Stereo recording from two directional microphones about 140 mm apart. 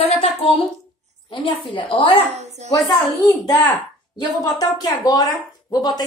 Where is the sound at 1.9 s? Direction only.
40° left (ahead or behind).